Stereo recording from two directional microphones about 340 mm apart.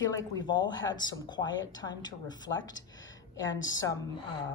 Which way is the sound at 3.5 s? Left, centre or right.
Left.